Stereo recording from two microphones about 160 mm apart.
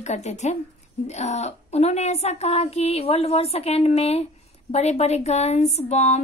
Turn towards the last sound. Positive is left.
turn(degrees=45)  # may be behind; listen again after turning